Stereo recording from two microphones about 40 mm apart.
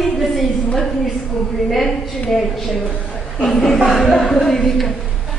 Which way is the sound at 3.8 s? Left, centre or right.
Centre.